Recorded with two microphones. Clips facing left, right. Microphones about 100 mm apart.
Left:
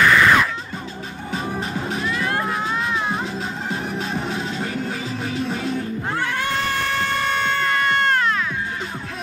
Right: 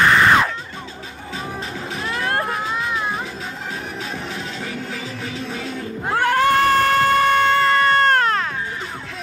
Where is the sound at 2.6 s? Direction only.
10° right (ahead or behind).